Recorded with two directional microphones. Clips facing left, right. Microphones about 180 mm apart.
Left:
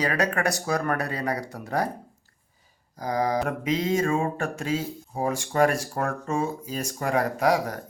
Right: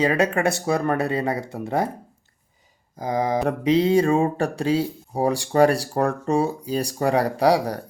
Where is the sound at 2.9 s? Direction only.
20° right (ahead or behind).